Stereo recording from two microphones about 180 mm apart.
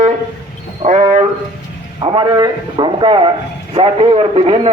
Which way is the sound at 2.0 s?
25° right (ahead or behind).